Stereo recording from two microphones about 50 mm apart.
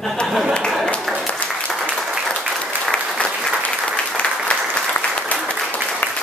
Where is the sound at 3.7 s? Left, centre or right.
Centre.